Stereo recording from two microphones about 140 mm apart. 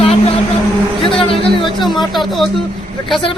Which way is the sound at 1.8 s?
Centre (ahead or behind).